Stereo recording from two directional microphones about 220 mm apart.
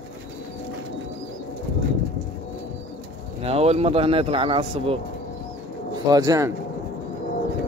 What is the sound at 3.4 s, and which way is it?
A man's voice, 25° right (ahead or behind).